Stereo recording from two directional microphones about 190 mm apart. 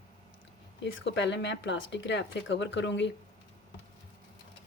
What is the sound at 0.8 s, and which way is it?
Speech, 70° left (ahead or behind).